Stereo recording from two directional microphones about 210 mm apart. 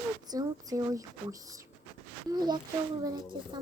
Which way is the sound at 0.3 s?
20° right (ahead or behind).